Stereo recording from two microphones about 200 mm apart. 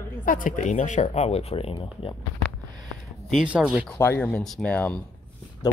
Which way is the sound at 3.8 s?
10° left (ahead or behind).